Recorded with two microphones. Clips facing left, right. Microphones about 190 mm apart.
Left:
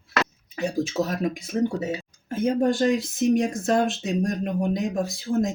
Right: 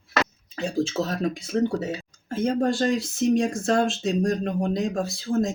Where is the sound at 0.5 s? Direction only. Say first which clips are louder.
Even; 10° left (ahead or behind).